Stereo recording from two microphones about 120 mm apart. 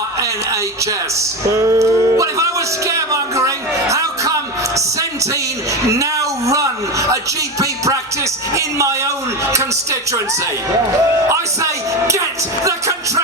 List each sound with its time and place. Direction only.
1.5 s music: 25° right (ahead or behind)
5.9 s a sound: 25° right (ahead or behind)
8.5 s speech: 25° right (ahead or behind)
11.3 s speech: 25° right (ahead or behind)